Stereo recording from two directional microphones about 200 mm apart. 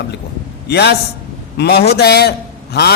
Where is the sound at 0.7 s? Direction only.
55° left (ahead or behind).